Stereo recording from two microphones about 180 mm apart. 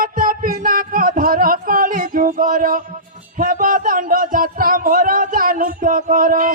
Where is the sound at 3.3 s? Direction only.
50° right (ahead or behind).